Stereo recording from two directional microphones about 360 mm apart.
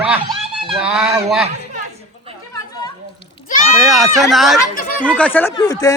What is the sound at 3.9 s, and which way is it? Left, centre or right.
Speech, centre.